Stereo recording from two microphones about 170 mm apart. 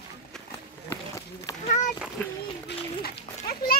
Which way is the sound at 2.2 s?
10° left (ahead or behind).